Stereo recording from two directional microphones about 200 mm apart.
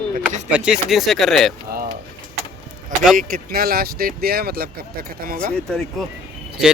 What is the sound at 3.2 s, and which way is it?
Speech, 45° right (ahead or behind).